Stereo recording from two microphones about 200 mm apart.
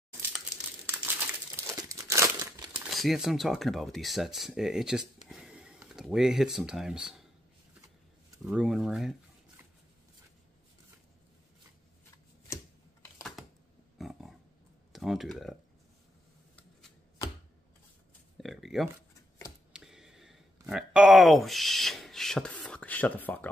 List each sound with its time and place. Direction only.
0.3 s crumpling: 5° right (ahead or behind)
2.9 s speech: centre (ahead or behind)
8.5 s speech: centre (ahead or behind)
13.4 s a sound: centre (ahead or behind)
13.9 s wild animals: centre (ahead or behind)
14.9 s speech: centre (ahead or behind)
18.4 s a sound: centre (ahead or behind)
20.6 s speech: 5° right (ahead or behind)